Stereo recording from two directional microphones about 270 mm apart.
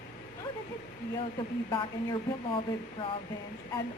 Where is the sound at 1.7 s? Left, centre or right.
Centre.